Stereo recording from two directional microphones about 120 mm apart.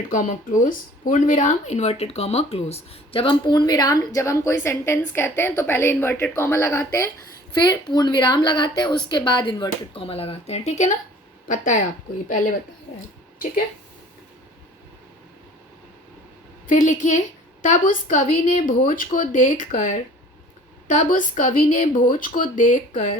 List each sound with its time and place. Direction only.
0.1 s speech: 90° left; by 7.1 s 20° left (ahead or behind)
7.6 s speech: 35° left (ahead or behind); by 10.9 s 75° left (ahead or behind)
11.4 s a woman's voice: 90° left
16.6 s a woman's voice: 90° left